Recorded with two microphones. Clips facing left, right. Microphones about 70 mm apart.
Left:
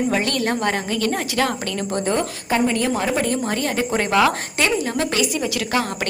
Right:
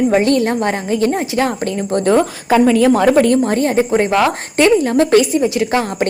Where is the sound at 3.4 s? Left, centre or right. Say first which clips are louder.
Right 8 dB; right.